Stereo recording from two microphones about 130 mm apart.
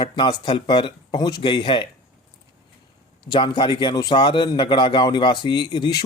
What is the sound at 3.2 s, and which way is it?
Speech, 40° left (ahead or behind).